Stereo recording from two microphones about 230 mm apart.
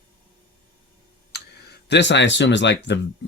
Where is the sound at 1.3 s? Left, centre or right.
Left.